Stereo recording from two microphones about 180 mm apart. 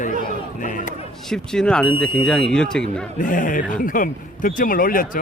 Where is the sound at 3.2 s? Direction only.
45° left (ahead or behind).